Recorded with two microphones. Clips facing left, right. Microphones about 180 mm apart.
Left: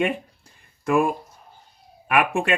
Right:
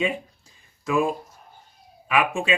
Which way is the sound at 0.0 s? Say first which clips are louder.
Left 2 dB; 60° left (ahead or behind).